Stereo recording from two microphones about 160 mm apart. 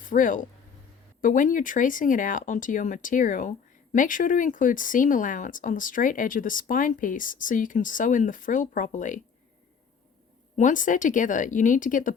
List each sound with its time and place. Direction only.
0.0 s speech: 55° left (ahead or behind)
10.6 s speech: 55° left (ahead or behind)